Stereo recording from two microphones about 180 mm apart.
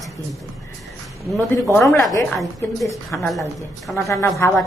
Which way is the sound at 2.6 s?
10° left (ahead or behind).